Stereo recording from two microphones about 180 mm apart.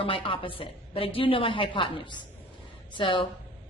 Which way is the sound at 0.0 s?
30° left (ahead or behind).